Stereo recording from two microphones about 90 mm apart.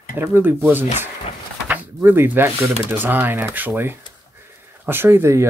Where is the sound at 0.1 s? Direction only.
25° right (ahead or behind).